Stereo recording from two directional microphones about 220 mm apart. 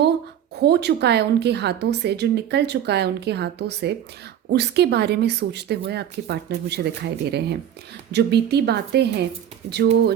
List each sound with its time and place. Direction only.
0.6 s a woman's voice: 50° right (ahead or behind)